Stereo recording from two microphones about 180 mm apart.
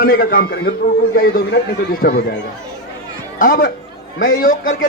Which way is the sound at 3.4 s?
50° left (ahead or behind).